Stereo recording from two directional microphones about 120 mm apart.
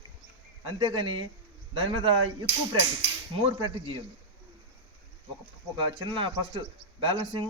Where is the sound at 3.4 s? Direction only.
45° right (ahead or behind).